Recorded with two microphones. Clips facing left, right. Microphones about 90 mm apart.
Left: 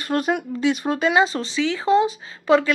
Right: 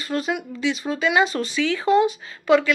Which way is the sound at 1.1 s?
30° left (ahead or behind).